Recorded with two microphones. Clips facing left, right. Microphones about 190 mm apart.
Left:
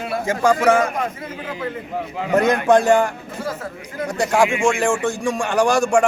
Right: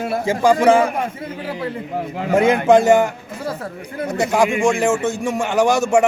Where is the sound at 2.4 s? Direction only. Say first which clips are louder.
Right 2 dB; 10° right (ahead or behind).